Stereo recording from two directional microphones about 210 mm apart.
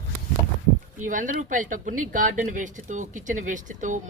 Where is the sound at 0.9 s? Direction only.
40° right (ahead or behind).